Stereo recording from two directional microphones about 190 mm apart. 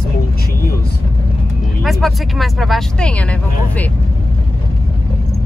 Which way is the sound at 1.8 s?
Centre (ahead or behind).